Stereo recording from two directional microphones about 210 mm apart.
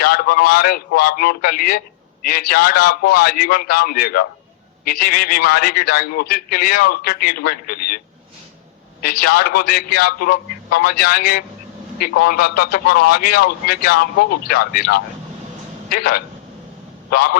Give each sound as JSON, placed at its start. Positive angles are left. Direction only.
{"t": 0.0, "sound": "a man's voice", "side_deg": 45}